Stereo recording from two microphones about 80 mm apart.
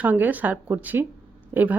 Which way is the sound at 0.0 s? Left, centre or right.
Right.